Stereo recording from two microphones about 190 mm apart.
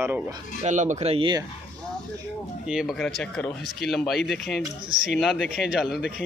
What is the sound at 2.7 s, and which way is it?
Speech, centre (ahead or behind).